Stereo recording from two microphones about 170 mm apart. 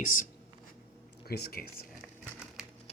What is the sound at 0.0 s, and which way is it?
Speech, 50° left (ahead or behind).